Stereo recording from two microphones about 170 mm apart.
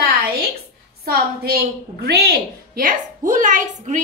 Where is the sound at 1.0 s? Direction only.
65° right (ahead or behind).